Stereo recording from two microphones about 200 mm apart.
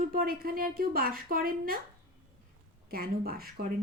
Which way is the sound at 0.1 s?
50° right (ahead or behind).